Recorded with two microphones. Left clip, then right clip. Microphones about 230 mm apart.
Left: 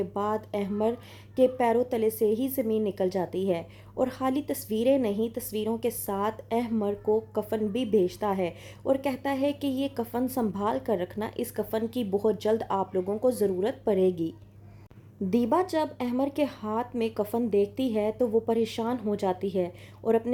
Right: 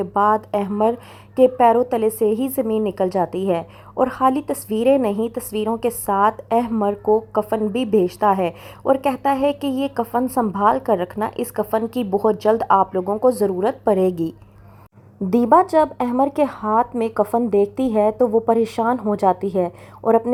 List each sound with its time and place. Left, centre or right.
0.0 s a woman's voice: centre